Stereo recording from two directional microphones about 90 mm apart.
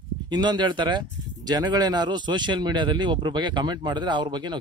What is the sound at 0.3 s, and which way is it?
Speech, 55° right (ahead or behind).